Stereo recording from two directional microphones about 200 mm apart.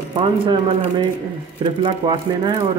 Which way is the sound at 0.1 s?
25° right (ahead or behind).